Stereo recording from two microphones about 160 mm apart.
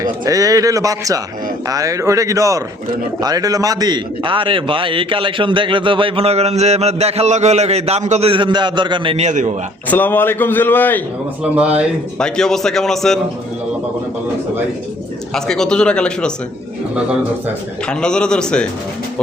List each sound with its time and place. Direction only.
0.0 s a man's voice: 20° right (ahead or behind)
9.2 s a man's voice: 50° right (ahead or behind)
9.9 s a man's voice: 10° left (ahead or behind)
11.5 s a man's voice: 10° right (ahead or behind)
12.2 s a man's voice: 5° left (ahead or behind)
15.4 s a man's voice: 5° left (ahead or behind)
17.8 s a man's voice: 5° left (ahead or behind)